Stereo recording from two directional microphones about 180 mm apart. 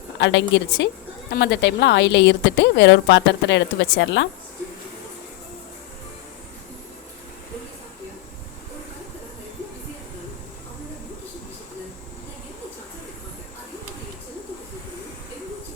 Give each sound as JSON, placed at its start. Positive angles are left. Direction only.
{"t": 0.2, "sound": "a woman's voice", "side_deg": 85}
{"t": 1.3, "sound": "a woman's voice", "side_deg": 70}